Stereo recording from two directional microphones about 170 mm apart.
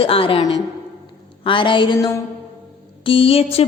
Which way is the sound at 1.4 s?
30° left (ahead or behind).